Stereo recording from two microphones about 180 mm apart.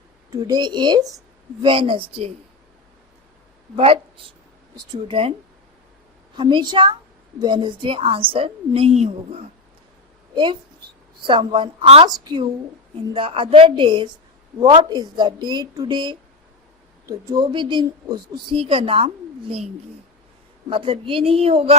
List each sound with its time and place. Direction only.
0.3 s a woman's voice: 20° right (ahead or behind)
3.8 s a woman's voice: 30° right (ahead or behind)
6.3 s a woman's voice: 25° right (ahead or behind)
20.7 s a woman's voice: 30° right (ahead or behind)